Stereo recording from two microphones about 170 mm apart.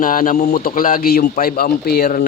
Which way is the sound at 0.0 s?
55° left (ahead or behind).